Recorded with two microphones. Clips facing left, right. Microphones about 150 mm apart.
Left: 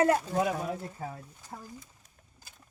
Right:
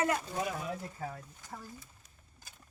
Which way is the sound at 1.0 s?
15° left (ahead or behind).